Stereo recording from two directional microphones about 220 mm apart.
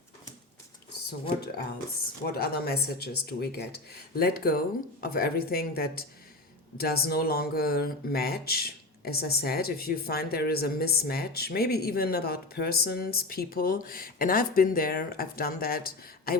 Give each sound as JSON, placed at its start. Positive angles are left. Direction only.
{"t": 2.2, "sound": "speech", "side_deg": 45}